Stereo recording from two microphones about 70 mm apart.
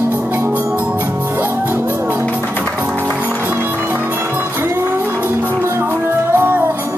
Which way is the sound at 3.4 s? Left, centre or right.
Right.